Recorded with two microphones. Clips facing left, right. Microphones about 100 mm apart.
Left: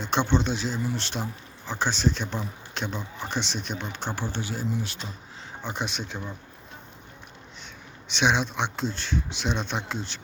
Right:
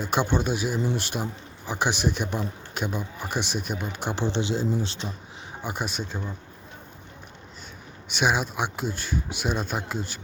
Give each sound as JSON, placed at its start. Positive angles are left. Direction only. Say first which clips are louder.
{"t": 0.0, "sound": "speech", "louder": "even", "side_deg": -5}
{"t": 4.1, "sound": "speech", "louder": "right 8 dB", "side_deg": -20}
{"t": 5.6, "sound": "speech", "louder": "right 1 dB", "side_deg": -5}
{"t": 8.1, "sound": "speech", "louder": "even", "side_deg": -5}